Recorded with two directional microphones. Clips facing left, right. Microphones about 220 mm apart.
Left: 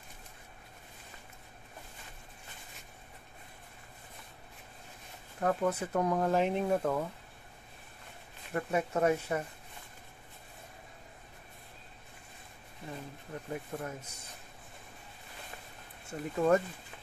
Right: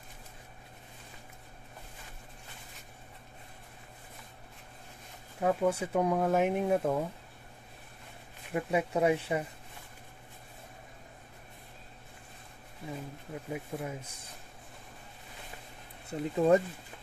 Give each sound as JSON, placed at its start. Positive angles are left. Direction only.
{"t": 5.4, "sound": "speech", "side_deg": -10}
{"t": 8.5, "sound": "speech", "side_deg": -10}
{"t": 12.9, "sound": "speech", "side_deg": -10}
{"t": 16.1, "sound": "speech", "side_deg": -15}